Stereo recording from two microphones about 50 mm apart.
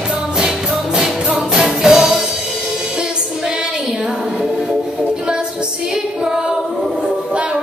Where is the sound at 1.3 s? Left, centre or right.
Right.